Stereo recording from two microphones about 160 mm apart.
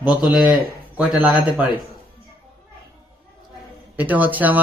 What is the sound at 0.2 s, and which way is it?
Speech, 5° right (ahead or behind).